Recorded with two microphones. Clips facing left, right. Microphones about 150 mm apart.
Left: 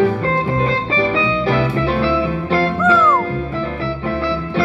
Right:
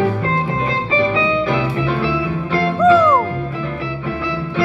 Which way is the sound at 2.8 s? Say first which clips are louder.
Right 6 dB; 20° right (ahead or behind).